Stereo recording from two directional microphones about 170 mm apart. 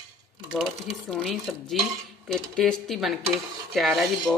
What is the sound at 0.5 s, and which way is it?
Dishes, centre (ahead or behind).